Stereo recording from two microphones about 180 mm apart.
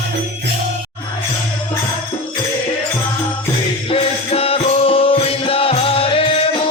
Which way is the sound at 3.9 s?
35° left (ahead or behind).